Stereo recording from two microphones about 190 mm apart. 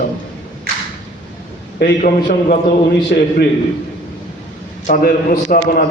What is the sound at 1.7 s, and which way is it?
A man's voice, 55° left (ahead or behind).